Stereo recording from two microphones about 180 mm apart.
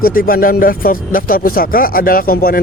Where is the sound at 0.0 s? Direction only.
55° left (ahead or behind).